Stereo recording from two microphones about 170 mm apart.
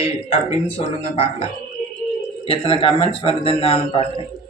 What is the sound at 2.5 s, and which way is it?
Speech, 35° left (ahead or behind).